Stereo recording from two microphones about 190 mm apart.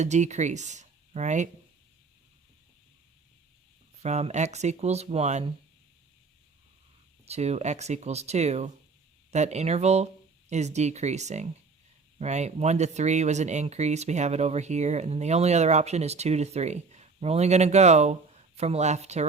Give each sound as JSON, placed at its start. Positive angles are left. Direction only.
{"t": 0.0, "sound": "speech", "side_deg": -40}
{"t": 4.0, "sound": "speech", "side_deg": -35}
{"t": 7.3, "sound": "speech", "side_deg": -35}